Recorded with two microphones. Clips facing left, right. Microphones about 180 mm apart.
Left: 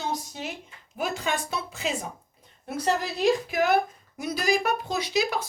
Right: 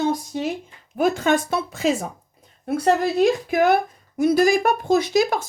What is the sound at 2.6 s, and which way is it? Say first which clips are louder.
Speech: right 8 dB; 55° right (ahead or behind).